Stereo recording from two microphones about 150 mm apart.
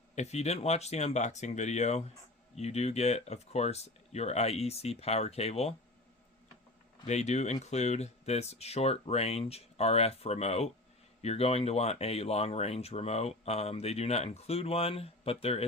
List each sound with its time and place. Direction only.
0.2 s speech: 45° left (ahead or behind)
7.0 s speech: 45° left (ahead or behind)